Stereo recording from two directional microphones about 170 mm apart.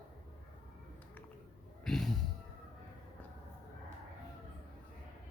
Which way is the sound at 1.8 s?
Centre (ahead or behind).